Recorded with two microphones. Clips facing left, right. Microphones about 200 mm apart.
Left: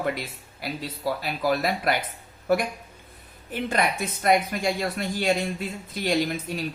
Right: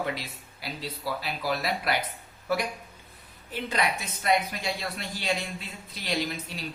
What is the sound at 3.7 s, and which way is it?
Speech, 50° left (ahead or behind).